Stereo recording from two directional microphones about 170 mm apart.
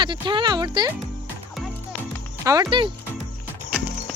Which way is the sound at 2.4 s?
20° right (ahead or behind).